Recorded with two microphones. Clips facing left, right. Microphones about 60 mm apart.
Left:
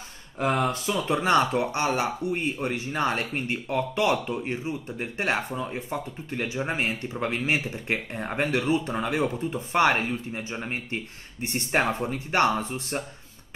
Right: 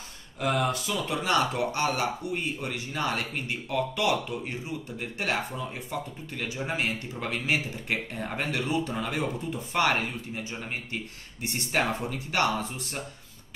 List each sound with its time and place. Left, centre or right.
0.4 s speech: left